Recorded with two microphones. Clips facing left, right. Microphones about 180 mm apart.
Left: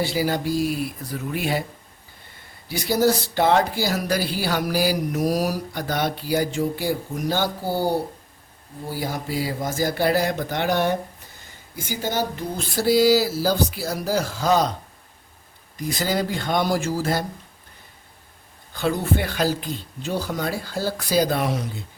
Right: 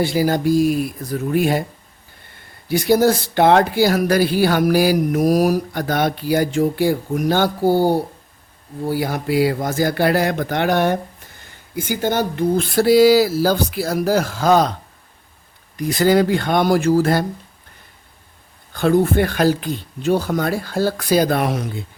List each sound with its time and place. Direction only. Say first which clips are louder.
0.0 s speech: right 6 dB; 50° right (ahead or behind)
2.6 s speech: right 5 dB; 55° right (ahead or behind)
8.9 s speech: right 7 dB; 65° right (ahead or behind)
15.8 s speech: right 9 dB; 60° right (ahead or behind)
18.7 s speech: right 7 dB; 50° right (ahead or behind)